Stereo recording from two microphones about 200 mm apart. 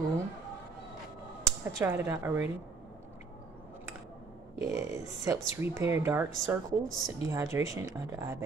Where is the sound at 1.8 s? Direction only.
10° right (ahead or behind).